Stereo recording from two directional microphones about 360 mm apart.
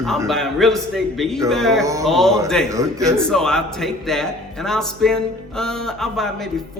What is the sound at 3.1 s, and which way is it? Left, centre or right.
A man's voice, centre.